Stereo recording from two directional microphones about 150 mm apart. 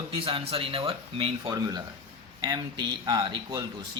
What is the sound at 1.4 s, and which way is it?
Speech, 25° right (ahead or behind).